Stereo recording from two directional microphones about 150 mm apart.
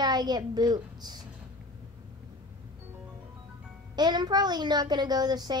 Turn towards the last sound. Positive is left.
turn(degrees=-25)  # may be behind; listen again after turning